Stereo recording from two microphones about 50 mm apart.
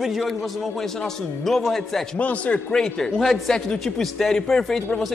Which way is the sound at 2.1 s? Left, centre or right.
Left.